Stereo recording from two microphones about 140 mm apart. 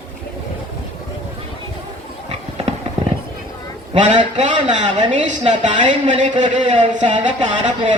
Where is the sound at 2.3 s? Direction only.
50° right (ahead or behind).